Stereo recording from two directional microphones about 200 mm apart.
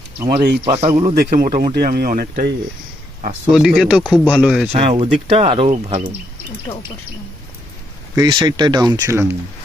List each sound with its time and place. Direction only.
0.3 s speech: 50° right (ahead or behind)
0.6 s speech: 30° right (ahead or behind)
1.7 s speech: 50° right (ahead or behind)
3.5 s speech: centre (ahead or behind)
4.7 s speech: 30° right (ahead or behind)
6.7 s speech: 10° left (ahead or behind)
8.1 s speech: 20° right (ahead or behind)